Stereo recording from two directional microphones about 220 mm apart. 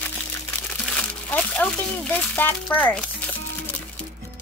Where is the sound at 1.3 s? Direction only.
5° left (ahead or behind).